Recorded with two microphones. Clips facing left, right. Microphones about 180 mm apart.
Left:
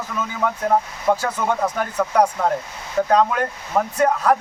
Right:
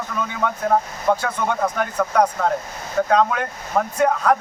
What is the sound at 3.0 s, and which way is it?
Speech, 15° left (ahead or behind).